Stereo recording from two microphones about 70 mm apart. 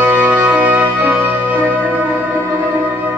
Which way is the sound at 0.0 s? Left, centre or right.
Right.